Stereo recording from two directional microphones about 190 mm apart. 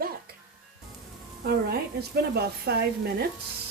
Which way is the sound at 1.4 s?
55° right (ahead or behind).